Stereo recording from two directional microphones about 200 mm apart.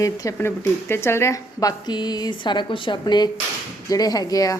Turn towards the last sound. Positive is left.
turn(degrees=15)  # may be behind; listen again after turning